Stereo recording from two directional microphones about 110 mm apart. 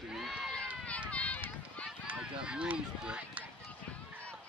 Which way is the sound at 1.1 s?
10° left (ahead or behind).